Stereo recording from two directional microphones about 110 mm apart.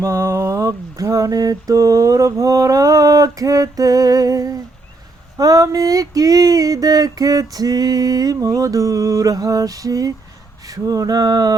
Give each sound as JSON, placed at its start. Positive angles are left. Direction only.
{"t": 0.0, "sound": "mantra", "side_deg": -25}